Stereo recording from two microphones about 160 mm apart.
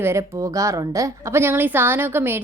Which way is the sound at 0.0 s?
15° right (ahead or behind).